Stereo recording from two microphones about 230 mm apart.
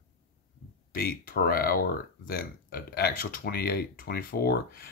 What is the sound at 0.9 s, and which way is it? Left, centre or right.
Speech, left.